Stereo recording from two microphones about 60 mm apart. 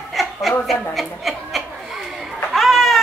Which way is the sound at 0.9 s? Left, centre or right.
Centre.